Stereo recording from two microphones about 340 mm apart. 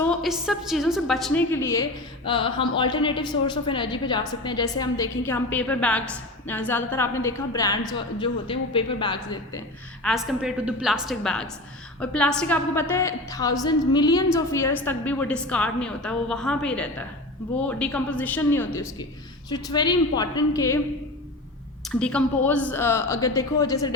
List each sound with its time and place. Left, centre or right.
0.0 s a woman's voice: centre
10.0 s a woman's voice: centre
21.9 s a woman's voice: centre